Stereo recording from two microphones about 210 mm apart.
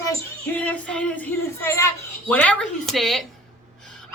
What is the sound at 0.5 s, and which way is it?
A child's voice, 5° left (ahead or behind).